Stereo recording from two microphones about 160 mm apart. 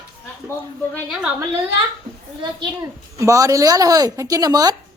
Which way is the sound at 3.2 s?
20° right (ahead or behind).